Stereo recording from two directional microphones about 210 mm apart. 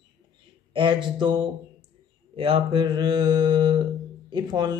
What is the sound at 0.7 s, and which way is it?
Mantra, 20° right (ahead or behind).